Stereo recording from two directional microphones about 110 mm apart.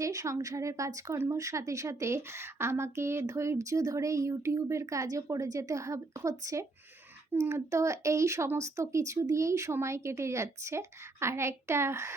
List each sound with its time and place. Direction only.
0.0 s speech: 30° right (ahead or behind)